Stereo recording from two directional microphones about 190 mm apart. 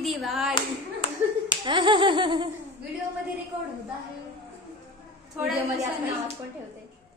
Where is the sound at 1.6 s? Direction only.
25° right (ahead or behind).